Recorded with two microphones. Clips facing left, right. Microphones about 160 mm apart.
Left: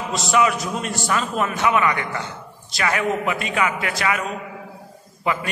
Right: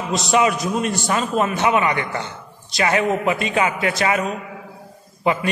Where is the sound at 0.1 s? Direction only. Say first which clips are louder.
Right 2 dB; 20° right (ahead or behind).